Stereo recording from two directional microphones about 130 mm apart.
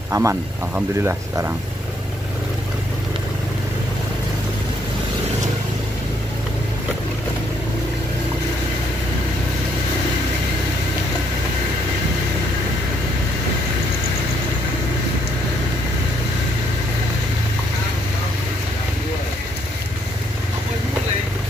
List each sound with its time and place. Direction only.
0.1 s speech: 20° right (ahead or behind)